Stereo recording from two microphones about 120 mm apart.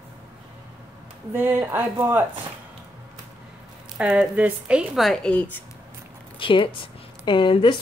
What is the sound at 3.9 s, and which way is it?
Speech, 10° right (ahead or behind).